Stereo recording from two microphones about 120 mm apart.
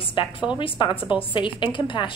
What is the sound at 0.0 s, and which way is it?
A woman's voice, 45° left (ahead or behind).